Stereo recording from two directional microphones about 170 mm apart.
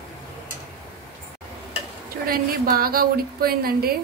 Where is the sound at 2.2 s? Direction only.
60° right (ahead or behind).